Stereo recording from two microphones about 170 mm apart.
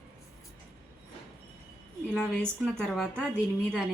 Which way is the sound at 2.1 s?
5° left (ahead or behind).